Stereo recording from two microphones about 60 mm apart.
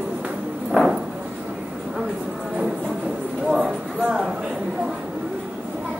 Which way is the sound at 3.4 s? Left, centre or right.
Centre.